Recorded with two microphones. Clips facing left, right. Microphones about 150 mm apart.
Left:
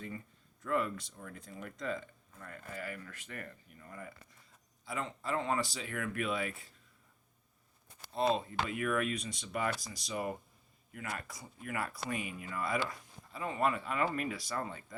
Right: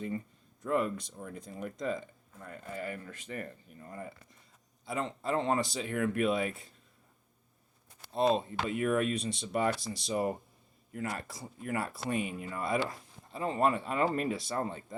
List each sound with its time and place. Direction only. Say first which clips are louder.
0.6 s speech: right 3 dB; 20° right (ahead or behind)
8.1 s speech: right 3 dB; 25° right (ahead or behind)